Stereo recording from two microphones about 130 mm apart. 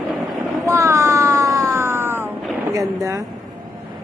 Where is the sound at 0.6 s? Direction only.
20° right (ahead or behind).